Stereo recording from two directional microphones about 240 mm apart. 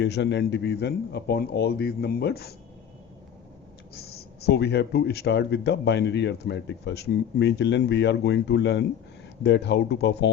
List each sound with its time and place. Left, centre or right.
0.0 s speech: left
3.9 s speech: left